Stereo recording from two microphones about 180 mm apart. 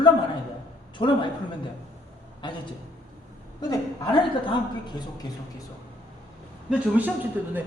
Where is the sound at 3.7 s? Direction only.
25° left (ahead or behind).